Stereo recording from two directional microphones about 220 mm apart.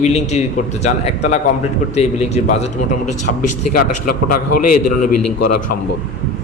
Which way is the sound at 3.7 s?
40° left (ahead or behind).